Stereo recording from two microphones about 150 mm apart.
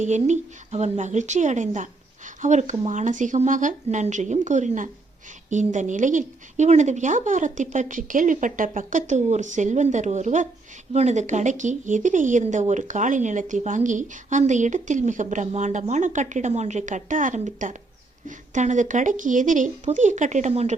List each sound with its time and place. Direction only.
0.0 s speech: 50° right (ahead or behind)